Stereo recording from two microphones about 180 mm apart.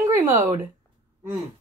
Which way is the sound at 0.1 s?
15° right (ahead or behind).